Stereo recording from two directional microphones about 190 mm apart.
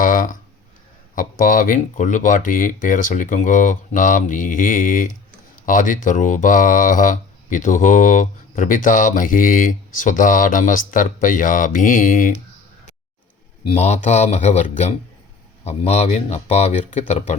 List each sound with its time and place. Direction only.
0.0 s a sound: 45° left (ahead or behind)
1.1 s speech: 45° left (ahead or behind)
13.7 s speech: 35° left (ahead or behind)